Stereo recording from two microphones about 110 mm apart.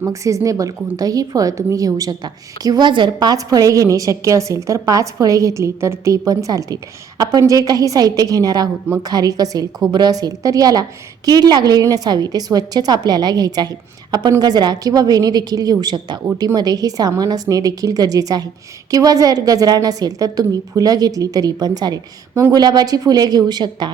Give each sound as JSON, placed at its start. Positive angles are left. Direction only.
{"t": 0.0, "sound": "a woman's voice", "side_deg": -30}